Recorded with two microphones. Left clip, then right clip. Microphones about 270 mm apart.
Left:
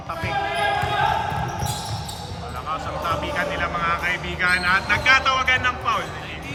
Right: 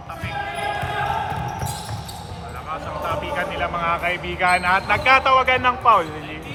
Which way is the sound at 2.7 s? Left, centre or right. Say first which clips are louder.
Left 1 dB; centre.